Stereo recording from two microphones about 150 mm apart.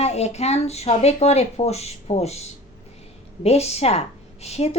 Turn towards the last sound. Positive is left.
turn(degrees=45)  # may be behind; listen again after turning